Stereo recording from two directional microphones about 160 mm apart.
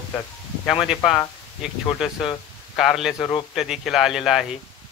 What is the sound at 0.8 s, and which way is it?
Speech, centre (ahead or behind).